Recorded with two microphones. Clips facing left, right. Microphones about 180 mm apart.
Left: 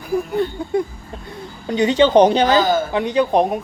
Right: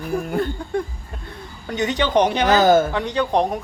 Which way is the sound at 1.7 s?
25° left (ahead or behind).